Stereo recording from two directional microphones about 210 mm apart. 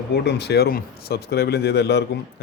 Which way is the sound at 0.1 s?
50° left (ahead or behind).